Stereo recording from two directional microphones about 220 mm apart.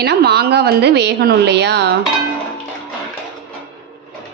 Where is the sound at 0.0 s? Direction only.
50° right (ahead or behind).